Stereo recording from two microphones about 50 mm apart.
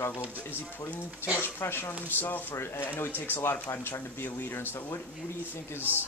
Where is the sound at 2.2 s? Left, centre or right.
Left.